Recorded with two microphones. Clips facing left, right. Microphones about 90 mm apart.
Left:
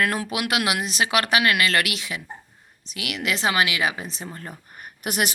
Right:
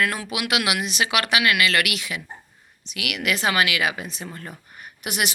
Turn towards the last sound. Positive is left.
turn(degrees=40)  # may be behind; listen again after turning